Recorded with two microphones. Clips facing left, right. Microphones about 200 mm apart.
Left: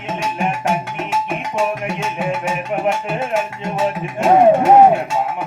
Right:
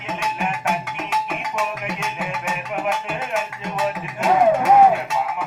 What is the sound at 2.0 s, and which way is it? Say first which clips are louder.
Music: left 8 dB; 30° left (ahead or behind).